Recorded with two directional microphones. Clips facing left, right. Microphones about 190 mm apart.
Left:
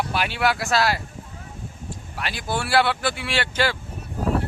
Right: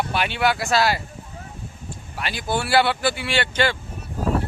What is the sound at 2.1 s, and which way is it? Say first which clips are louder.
Speech: right 2 dB; centre (ahead or behind).